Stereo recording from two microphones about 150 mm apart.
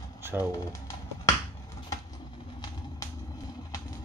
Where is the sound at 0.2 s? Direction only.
15° right (ahead or behind).